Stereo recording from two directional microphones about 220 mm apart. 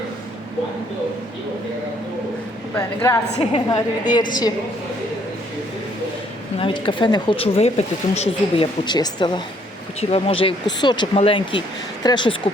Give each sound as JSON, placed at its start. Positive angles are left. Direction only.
{"t": 2.7, "sound": "a woman's voice", "side_deg": 15}
{"t": 3.3, "sound": "speech", "side_deg": 25}
{"t": 6.6, "sound": "speech", "side_deg": 25}